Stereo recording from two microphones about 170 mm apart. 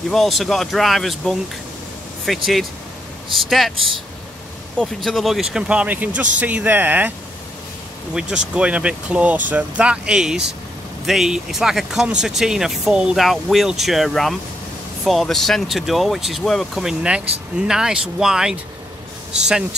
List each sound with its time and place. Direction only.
0.1 s speech: centre (ahead or behind)
4.7 s speech: centre (ahead or behind)
8.1 s speech: 5° right (ahead or behind)